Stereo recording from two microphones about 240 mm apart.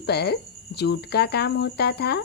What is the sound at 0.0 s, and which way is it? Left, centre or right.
Speech, left.